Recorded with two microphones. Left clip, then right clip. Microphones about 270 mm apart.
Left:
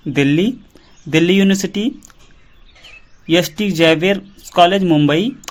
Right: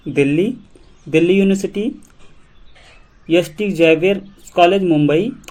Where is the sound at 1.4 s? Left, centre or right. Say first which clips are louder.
Even; left.